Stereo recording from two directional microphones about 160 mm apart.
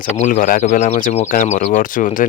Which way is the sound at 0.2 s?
55° left (ahead or behind).